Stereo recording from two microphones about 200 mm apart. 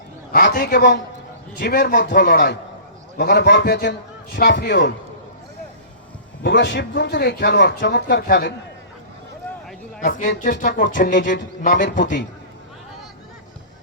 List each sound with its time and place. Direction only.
0.3 s speech: 50° left (ahead or behind)
6.4 s speech: 60° left (ahead or behind)
10.0 s a man's voice: 45° left (ahead or behind)